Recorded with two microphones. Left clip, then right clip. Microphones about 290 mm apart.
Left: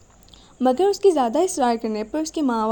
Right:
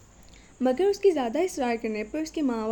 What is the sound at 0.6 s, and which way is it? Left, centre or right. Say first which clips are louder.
Speech: left 5 dB; left.